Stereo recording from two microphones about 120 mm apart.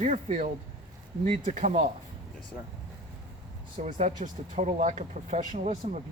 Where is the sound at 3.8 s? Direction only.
75° right (ahead or behind).